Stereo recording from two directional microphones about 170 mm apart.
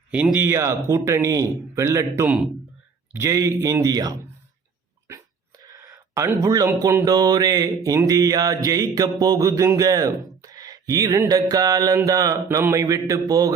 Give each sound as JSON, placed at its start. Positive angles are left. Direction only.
{"t": 0.1, "sound": "speech", "side_deg": -10}
{"t": 5.6, "sound": "speech", "side_deg": -20}